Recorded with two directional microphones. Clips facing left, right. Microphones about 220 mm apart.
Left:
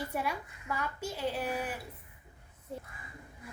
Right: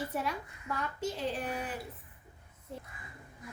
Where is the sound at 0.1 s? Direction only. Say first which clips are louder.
Even; 10° left (ahead or behind).